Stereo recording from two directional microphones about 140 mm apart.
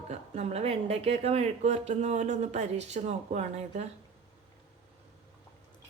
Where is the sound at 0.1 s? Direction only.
50° right (ahead or behind).